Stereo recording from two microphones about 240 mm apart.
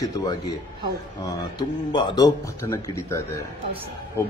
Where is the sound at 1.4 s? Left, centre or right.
Centre.